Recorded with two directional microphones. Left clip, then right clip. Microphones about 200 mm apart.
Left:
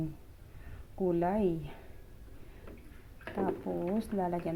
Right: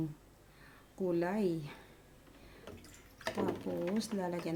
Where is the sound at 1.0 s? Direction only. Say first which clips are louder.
Left 4 dB; centre (ahead or behind).